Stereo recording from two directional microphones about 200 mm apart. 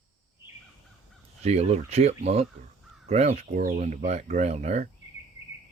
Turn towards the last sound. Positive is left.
turn(degrees=-35)  # may be behind; listen again after turning